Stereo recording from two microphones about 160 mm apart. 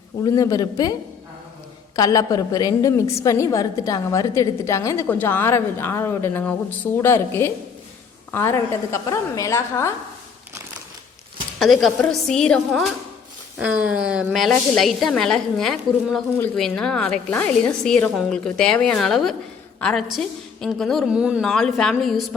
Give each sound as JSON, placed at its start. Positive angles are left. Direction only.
{"t": 0.3, "sound": "a woman's voice", "side_deg": 20}
{"t": 2.0, "sound": "a woman's voice", "side_deg": 20}
{"t": 11.6, "sound": "a woman's voice", "side_deg": 0}